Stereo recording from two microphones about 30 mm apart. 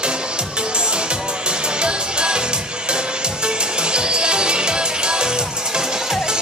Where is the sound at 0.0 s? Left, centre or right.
Right.